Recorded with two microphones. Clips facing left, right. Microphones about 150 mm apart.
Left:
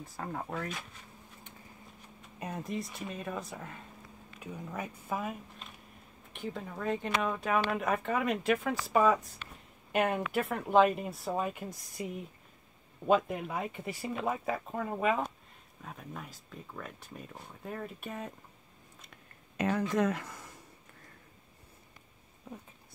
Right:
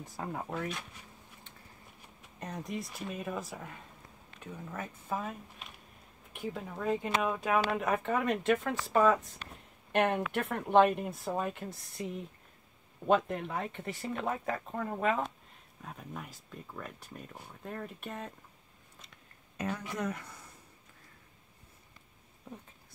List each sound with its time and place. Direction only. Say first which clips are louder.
0.2 s speech: right 1 dB; 5° right (ahead or behind)
2.3 s speech: left 2 dB; 5° left (ahead or behind)
4.4 s speech: left 2 dB; 10° left (ahead or behind)
6.3 s speech: even; 5° right (ahead or behind)
19.5 s speech: left 7 dB; 90° left